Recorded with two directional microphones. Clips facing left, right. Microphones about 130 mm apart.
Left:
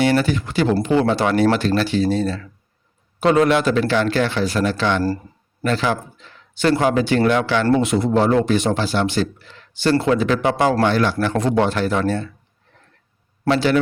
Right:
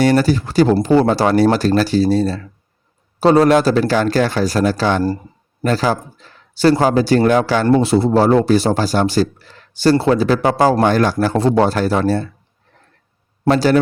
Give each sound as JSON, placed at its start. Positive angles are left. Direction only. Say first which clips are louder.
{"t": 0.0, "sound": "speech", "louder": "right 4 dB", "side_deg": -40}
{"t": 13.5, "sound": "speech", "louder": "right 4 dB", "side_deg": -40}